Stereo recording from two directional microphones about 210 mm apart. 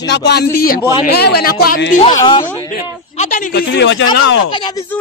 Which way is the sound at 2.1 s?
20° left (ahead or behind).